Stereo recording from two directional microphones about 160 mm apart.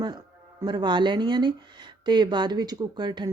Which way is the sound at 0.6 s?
30° right (ahead or behind).